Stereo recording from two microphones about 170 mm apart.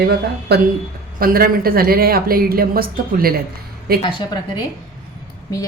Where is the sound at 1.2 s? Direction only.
60° right (ahead or behind).